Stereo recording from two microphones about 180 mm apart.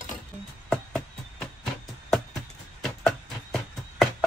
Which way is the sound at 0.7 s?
5° left (ahead or behind).